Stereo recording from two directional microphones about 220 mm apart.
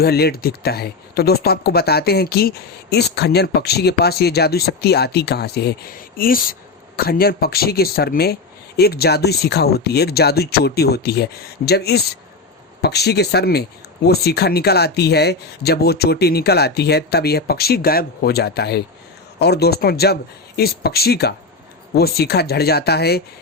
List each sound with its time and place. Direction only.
0.0 s speech: 45° left (ahead or behind)